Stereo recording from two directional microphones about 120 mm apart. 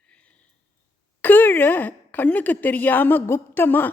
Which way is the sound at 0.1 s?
10° left (ahead or behind).